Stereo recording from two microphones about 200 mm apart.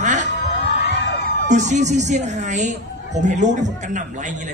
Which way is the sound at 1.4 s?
35° right (ahead or behind).